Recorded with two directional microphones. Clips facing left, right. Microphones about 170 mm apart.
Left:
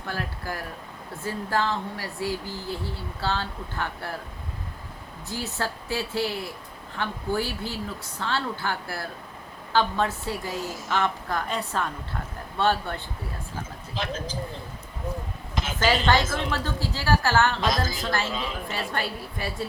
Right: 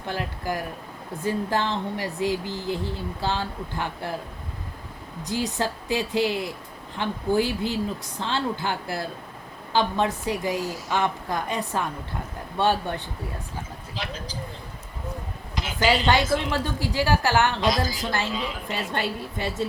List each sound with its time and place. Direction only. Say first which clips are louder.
0.1 s speech: right 4 dB; 15° right (ahead or behind)
5.2 s speech: right 5 dB; 15° right (ahead or behind)
15.5 s speech: right 1 dB; 15° right (ahead or behind)